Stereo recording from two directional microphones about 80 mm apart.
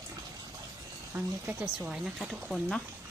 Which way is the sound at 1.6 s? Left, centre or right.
Centre.